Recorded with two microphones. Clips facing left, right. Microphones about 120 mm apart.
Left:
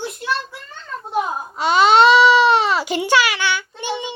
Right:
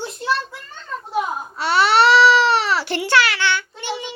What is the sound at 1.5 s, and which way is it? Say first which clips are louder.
Baby cry: left 3 dB; 15° left (ahead or behind).